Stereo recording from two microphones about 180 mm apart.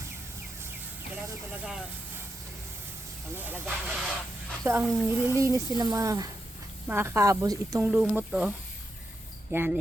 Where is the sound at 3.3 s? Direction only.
10° right (ahead or behind).